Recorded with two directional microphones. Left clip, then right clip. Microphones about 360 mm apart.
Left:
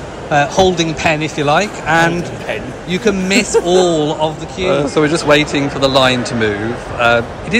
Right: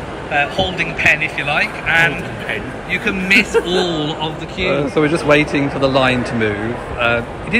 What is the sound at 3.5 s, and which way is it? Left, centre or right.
Speech, left.